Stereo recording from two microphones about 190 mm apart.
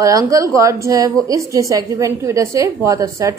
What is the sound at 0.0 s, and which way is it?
A woman's voice, 20° right (ahead or behind).